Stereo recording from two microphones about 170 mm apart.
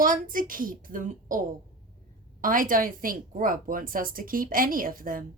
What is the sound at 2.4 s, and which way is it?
Speech, 55° right (ahead or behind).